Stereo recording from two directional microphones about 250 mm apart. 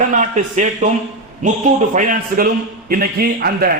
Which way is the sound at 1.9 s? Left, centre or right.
Right.